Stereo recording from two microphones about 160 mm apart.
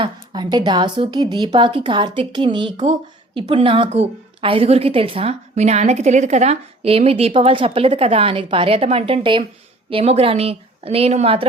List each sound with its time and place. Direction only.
0.0 s a woman's voice: 30° right (ahead or behind)